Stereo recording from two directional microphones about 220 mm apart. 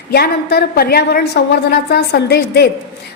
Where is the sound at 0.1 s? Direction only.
45° left (ahead or behind).